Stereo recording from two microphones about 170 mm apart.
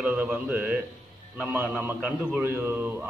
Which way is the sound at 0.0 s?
10° right (ahead or behind).